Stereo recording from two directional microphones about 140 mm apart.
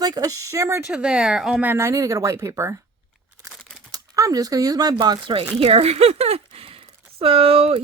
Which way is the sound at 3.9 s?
25° right (ahead or behind).